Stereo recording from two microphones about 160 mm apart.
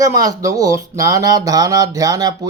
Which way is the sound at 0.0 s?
20° right (ahead or behind).